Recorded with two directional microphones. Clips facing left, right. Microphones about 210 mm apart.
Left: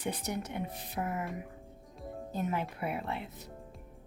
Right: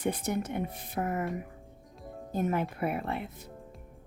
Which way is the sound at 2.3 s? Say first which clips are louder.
Right 5 dB; 50° right (ahead or behind).